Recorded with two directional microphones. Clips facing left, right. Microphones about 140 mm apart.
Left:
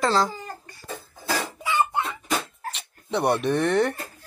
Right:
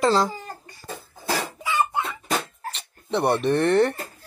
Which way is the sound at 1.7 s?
20° left (ahead or behind).